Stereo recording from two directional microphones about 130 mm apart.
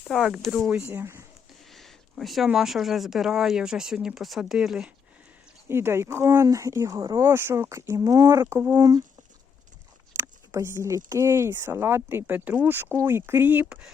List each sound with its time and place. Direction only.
0.1 s speech: centre (ahead or behind)
0.7 s speech: 15° right (ahead or behind)
1.7 s speech: centre (ahead or behind)
5.6 s speech: 20° right (ahead or behind)
7.0 s speech: 35° right (ahead or behind)
7.3 s speech: 20° right (ahead or behind)
10.2 s speech: 20° right (ahead or behind)